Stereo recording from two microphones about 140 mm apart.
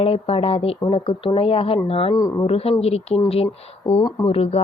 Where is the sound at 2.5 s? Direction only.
45° left (ahead or behind).